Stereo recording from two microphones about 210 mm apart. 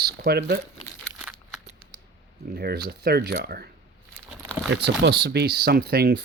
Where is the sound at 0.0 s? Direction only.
50° right (ahead or behind).